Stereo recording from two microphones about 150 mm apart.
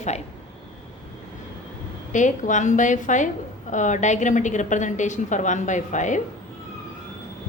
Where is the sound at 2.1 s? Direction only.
55° left (ahead or behind).